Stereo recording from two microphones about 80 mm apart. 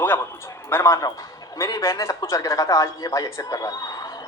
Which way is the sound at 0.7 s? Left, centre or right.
Left.